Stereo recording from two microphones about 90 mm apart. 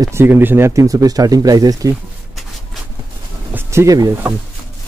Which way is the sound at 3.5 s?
35° right (ahead or behind).